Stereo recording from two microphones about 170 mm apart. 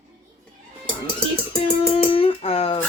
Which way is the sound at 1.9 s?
35° left (ahead or behind).